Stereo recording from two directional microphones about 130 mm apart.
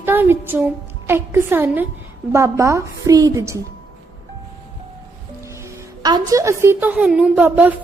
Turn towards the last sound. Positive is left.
turn(degrees=-10)  # may be behind; listen again after turning